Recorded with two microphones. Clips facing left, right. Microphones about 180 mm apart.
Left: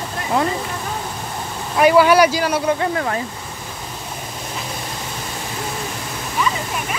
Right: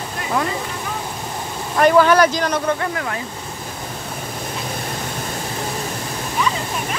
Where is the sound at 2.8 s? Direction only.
30° left (ahead or behind).